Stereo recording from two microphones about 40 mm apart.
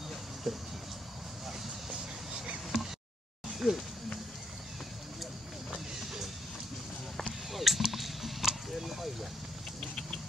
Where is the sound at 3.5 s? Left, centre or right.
Centre.